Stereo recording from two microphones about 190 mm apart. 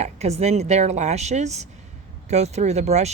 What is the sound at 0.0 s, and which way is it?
Speech, 35° right (ahead or behind).